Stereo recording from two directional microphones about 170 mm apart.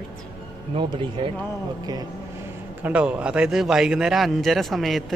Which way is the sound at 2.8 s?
10° right (ahead or behind).